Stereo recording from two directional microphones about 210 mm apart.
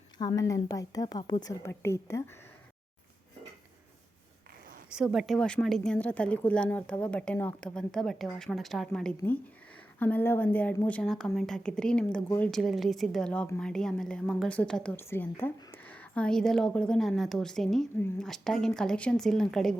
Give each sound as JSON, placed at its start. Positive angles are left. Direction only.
{"t": 0.2, "sound": "a woman's voice", "side_deg": 15}
{"t": 4.9, "sound": "a woman's voice", "side_deg": -5}